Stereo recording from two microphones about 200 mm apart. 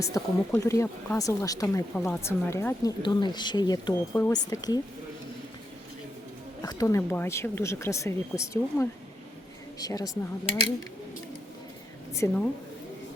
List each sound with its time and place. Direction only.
0.0 s speech: 15° left (ahead or behind)
6.6 s a woman's voice: 20° left (ahead or behind)
12.1 s speech: 15° left (ahead or behind)